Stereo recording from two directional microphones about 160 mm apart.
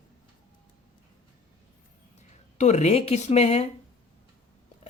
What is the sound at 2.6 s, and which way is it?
Speech, 45° left (ahead or behind).